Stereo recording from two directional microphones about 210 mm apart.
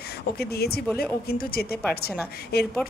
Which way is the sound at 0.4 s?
50° left (ahead or behind).